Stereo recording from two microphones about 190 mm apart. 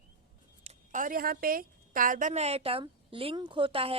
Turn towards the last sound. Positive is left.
turn(degrees=-30)  # may be behind; listen again after turning